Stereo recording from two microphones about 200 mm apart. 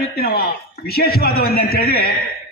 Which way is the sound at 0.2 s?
50° left (ahead or behind).